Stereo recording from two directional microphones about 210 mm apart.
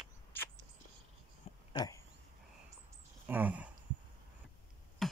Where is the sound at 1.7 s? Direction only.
15° left (ahead or behind).